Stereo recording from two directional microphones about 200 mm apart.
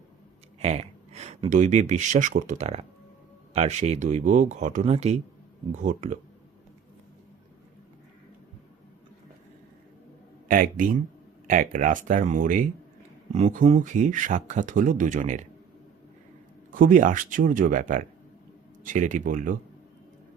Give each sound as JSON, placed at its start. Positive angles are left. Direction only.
{"t": 0.6, "sound": "speech", "side_deg": -30}
{"t": 10.5, "sound": "speech", "side_deg": -45}
{"t": 16.7, "sound": "speech", "side_deg": -40}